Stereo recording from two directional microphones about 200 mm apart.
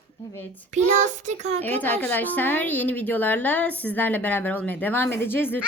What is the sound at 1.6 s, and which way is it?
A woman's voice, 10° left (ahead or behind).